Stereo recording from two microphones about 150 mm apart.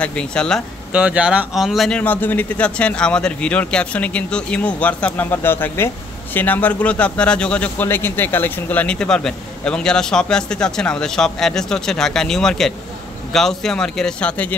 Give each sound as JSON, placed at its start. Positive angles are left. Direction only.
{"t": 0.0, "sound": "speech", "side_deg": 5}
{"t": 0.9, "sound": "a man's voice", "side_deg": -5}